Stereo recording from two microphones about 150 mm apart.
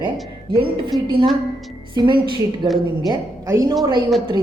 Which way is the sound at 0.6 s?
30° right (ahead or behind).